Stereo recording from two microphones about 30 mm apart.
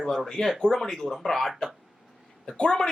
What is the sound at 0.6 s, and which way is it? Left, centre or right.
Speech, centre.